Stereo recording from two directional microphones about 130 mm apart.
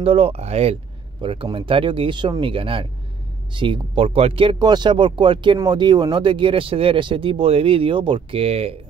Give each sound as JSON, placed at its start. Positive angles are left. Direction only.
{"t": 0.0, "sound": "speech", "side_deg": -50}
{"t": 1.2, "sound": "speech", "side_deg": -40}